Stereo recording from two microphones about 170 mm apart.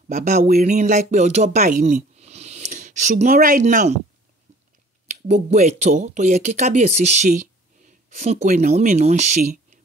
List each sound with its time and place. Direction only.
0.1 s speech: 45° right (ahead or behind)
5.0 s speech: 45° right (ahead or behind)